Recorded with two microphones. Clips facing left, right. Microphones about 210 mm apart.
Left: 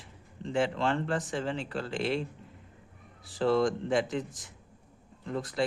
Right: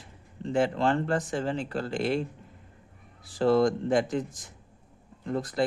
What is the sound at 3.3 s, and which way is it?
Speech, 40° right (ahead or behind).